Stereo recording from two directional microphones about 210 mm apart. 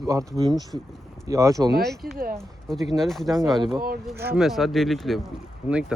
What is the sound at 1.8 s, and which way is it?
Speech, centre (ahead or behind).